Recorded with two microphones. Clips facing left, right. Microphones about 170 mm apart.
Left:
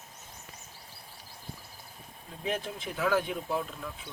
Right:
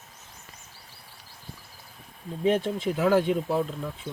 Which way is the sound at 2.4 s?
35° right (ahead or behind).